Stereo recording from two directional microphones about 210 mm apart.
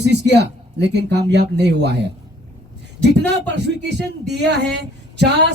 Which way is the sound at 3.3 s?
55° right (ahead or behind).